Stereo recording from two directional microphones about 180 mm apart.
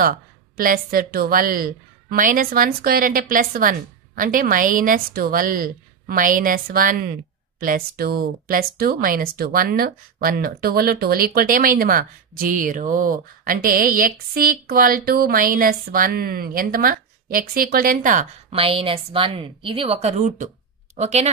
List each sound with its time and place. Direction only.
0.0 s speech: 50° right (ahead or behind)
18.5 s a woman's voice: 30° right (ahead or behind)